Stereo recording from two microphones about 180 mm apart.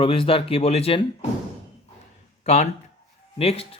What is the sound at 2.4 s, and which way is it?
Speech, 35° left (ahead or behind).